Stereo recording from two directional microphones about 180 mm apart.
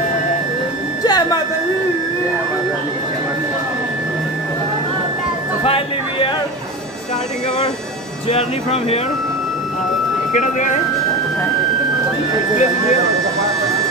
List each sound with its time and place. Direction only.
1.0 s a sound: 20° left (ahead or behind)
8.3 s speech: 35° left (ahead or behind)
10.3 s speech: 45° left (ahead or behind)